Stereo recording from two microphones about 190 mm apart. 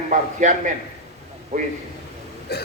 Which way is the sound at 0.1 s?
40° right (ahead or behind).